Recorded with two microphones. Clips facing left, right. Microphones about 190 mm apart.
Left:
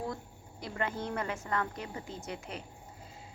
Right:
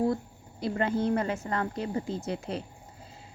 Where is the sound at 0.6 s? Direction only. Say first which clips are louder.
Right 8 dB; 30° right (ahead or behind).